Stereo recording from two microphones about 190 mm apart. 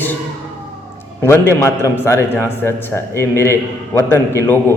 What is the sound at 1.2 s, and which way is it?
A man's voice, 15° left (ahead or behind).